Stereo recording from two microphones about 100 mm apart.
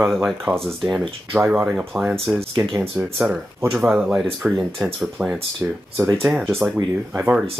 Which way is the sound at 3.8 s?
10° right (ahead or behind).